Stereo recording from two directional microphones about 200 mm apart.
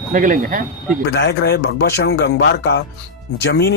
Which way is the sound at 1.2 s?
55° left (ahead or behind).